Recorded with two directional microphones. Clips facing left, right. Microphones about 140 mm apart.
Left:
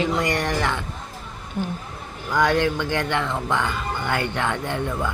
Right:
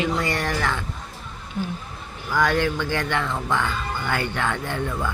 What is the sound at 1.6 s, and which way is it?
Speech, 45° left (ahead or behind).